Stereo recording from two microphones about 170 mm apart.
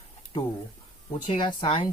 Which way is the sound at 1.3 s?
30° left (ahead or behind).